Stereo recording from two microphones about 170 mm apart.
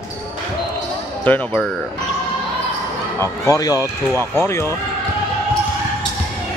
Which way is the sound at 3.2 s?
20° left (ahead or behind).